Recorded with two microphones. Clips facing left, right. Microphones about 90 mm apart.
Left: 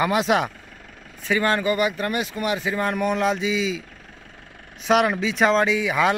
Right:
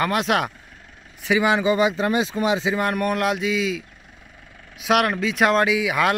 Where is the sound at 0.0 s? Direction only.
Centre (ahead or behind).